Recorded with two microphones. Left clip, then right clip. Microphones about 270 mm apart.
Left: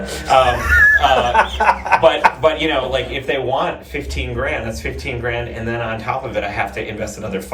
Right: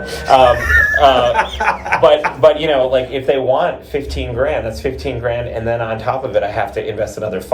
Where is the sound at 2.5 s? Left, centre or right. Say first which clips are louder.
Right 4 dB; centre.